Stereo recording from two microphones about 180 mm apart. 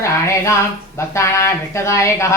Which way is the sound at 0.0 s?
15° left (ahead or behind).